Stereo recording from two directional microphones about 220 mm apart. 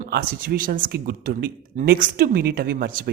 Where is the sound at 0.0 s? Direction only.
40° right (ahead or behind).